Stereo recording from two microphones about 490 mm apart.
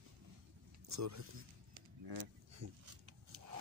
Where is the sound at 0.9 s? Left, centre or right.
Right.